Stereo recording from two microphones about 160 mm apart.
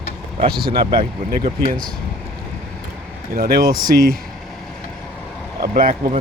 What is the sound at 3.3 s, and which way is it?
Speech, 70° right (ahead or behind).